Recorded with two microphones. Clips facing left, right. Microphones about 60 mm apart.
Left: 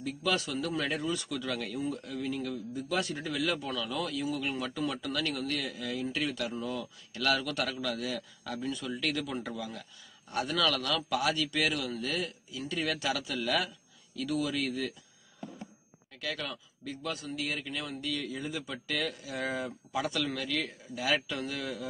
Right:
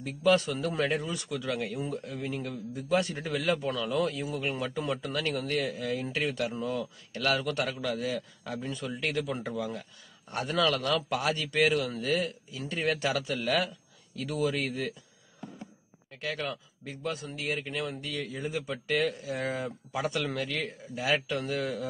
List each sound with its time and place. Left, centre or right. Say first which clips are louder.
0.0 s a man's voice: right 6 dB; right
16.2 s a man's voice: right 3 dB; right